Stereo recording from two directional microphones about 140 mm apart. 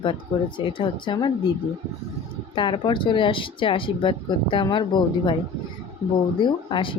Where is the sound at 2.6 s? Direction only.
35° left (ahead or behind).